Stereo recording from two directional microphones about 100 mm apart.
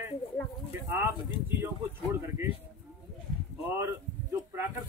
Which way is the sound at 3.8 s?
25° right (ahead or behind).